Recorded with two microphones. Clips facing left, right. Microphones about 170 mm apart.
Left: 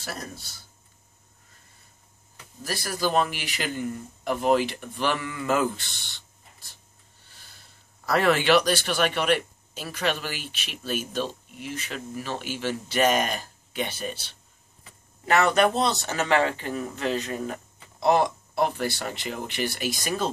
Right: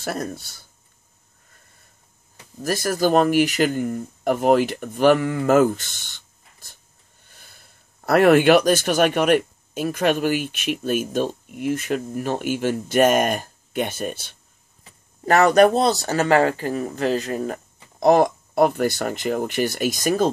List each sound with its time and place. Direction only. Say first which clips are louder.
0.0 s speech: right 9 dB; 55° right (ahead or behind)
2.6 s speech: right 8 dB; 45° right (ahead or behind)
8.0 s speech: right 8 dB; 55° right (ahead or behind)